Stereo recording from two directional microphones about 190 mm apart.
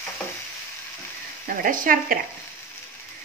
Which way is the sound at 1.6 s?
45° right (ahead or behind).